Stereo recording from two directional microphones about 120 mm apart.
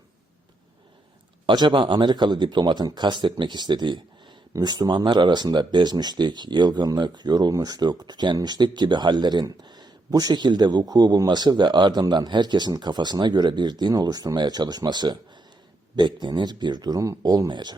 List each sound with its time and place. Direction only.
1.5 s speech: 40° right (ahead or behind)